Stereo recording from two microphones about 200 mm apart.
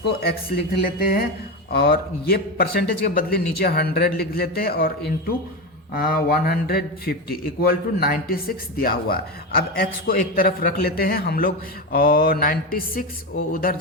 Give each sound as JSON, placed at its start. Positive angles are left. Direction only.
{"t": 0.0, "sound": "speech", "side_deg": 50}